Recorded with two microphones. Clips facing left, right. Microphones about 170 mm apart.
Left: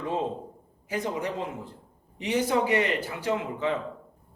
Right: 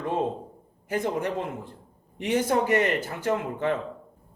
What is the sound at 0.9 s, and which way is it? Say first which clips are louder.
A man's voice: right 3 dB; 55° right (ahead or behind).